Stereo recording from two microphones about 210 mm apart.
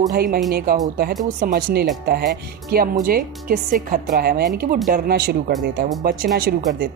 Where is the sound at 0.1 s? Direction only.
45° right (ahead or behind).